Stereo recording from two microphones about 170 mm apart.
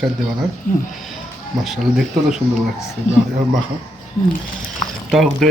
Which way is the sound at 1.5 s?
Centre (ahead or behind).